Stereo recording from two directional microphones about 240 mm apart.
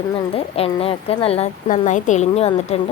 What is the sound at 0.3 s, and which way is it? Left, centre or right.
A woman's voice, left.